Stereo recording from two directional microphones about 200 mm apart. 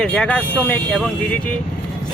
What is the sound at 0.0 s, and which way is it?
Speech, 5° left (ahead or behind).